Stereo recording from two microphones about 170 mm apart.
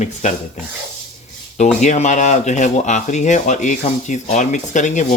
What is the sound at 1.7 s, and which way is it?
Speech, 45° left (ahead or behind).